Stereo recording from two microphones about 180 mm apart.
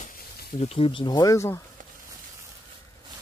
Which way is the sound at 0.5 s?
35° left (ahead or behind).